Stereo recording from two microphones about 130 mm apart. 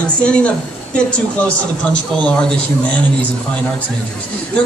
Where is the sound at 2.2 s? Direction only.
10° left (ahead or behind).